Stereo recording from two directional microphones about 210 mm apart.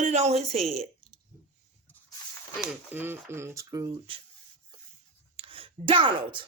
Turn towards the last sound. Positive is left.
turn(degrees=-25)  # may be behind; listen again after turning